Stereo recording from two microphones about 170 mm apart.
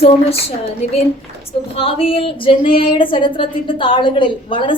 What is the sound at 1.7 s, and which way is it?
A woman's voice, 35° left (ahead or behind).